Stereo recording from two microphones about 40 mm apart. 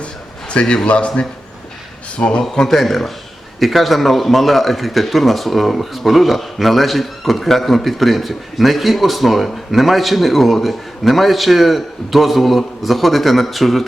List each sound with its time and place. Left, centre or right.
0.0 s a sound: left
0.9 s a man's voice: left
2.6 s speech: centre